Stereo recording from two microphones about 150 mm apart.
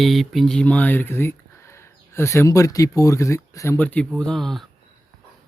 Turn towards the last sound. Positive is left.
turn(degrees=0)  # may be behind; listen again after turning